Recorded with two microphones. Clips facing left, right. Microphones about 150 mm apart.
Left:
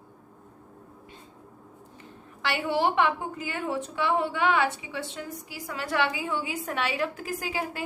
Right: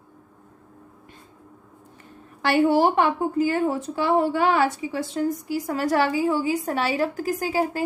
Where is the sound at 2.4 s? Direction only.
45° right (ahead or behind).